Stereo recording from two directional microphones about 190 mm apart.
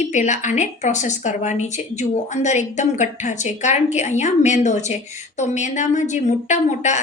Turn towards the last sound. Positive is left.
turn(degrees=40)  # may be behind; listen again after turning